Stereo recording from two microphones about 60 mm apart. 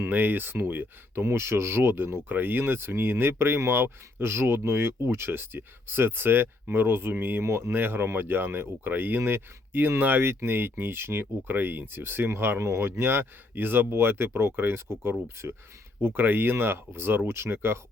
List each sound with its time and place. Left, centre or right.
0.1 s speech: right
1.2 s speech: right
13.0 s speech: right
16.0 s speech: right